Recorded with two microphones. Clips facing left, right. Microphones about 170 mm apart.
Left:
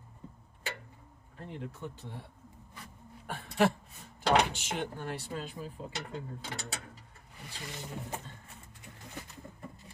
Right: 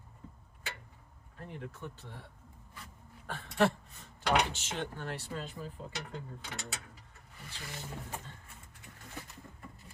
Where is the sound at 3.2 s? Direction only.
10° left (ahead or behind).